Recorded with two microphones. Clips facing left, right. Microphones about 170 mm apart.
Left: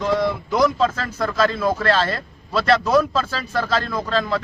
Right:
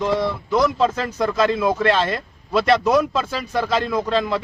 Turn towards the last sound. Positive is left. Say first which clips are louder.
# right 2 dB
turn(degrees=-20)  # may be behind; listen again after turning